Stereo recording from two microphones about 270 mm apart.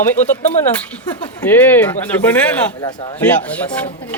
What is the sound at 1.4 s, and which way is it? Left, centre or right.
Speech, centre.